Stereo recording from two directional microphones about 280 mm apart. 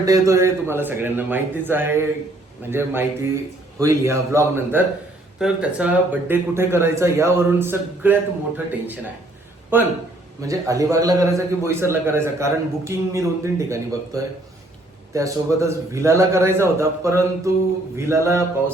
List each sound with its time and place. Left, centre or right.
0.0 s a man's voice: centre